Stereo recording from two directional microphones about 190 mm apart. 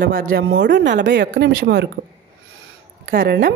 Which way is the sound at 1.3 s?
50° right (ahead or behind).